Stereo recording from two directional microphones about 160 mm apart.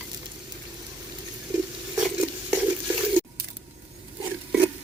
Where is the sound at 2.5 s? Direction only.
10° right (ahead or behind).